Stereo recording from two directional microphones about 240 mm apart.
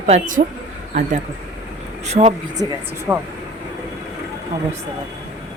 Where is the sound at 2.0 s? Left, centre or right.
Right.